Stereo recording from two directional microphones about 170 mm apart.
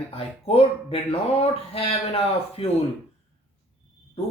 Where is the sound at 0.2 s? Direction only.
35° left (ahead or behind).